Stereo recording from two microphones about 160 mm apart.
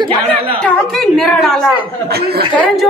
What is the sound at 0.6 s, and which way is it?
A woman's voice, centre (ahead or behind).